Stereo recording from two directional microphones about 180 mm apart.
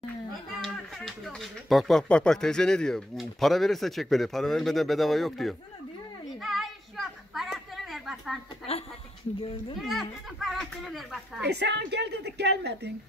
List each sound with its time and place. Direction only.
0.6 s speech: centre (ahead or behind)
6.4 s a sound: centre (ahead or behind)
9.8 s speech: centre (ahead or behind)
11.4 s a woman's voice: 70° right (ahead or behind)